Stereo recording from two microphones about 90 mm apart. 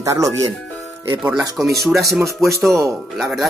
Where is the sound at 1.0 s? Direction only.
25° right (ahead or behind).